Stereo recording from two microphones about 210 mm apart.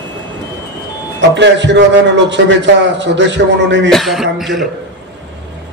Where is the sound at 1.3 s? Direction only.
55° right (ahead or behind).